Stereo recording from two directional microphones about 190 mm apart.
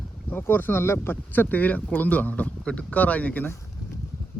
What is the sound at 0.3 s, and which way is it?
Speech, 10° left (ahead or behind).